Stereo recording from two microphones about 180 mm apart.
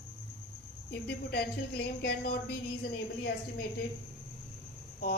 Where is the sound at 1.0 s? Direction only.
65° left (ahead or behind).